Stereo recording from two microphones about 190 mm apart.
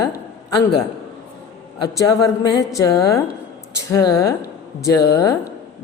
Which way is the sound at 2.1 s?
20° left (ahead or behind).